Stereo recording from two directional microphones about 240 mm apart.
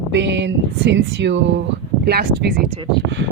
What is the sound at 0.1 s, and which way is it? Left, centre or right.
Speech, right.